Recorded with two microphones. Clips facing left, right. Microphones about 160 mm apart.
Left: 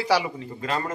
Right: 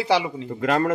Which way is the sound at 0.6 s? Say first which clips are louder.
Right 7 dB; 65° right (ahead or behind).